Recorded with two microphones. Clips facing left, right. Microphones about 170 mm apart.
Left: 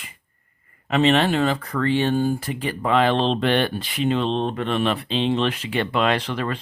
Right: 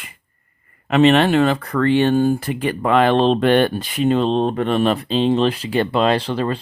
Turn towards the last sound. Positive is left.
turn(degrees=-30)  # may be behind; listen again after turning